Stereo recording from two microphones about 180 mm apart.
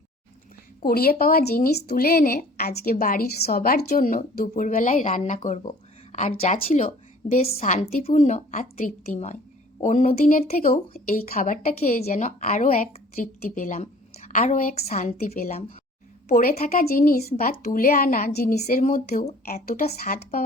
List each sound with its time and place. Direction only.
0.8 s a woman's voice: 55° left (ahead or behind)
12.0 s speech: 40° left (ahead or behind)
13.7 s speech: 40° left (ahead or behind)
14.8 s a woman's voice: 35° left (ahead or behind)
15.2 s speech: 50° left (ahead or behind)
16.3 s a woman's voice: 55° left (ahead or behind); by 20.1 s 35° left (ahead or behind)